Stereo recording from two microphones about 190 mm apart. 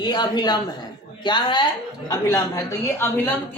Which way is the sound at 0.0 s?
25° left (ahead or behind).